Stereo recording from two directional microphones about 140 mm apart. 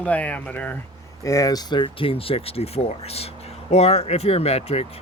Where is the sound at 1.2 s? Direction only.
25° left (ahead or behind).